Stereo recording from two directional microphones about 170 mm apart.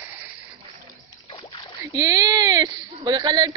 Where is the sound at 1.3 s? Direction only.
30° left (ahead or behind).